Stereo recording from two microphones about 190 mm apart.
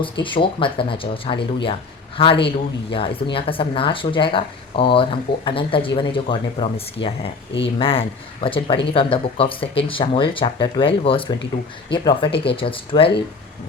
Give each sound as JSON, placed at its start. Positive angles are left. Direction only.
{"t": 0.0, "sound": "speech", "side_deg": 25}